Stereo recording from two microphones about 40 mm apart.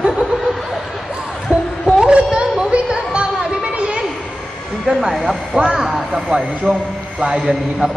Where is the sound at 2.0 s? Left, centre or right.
Right.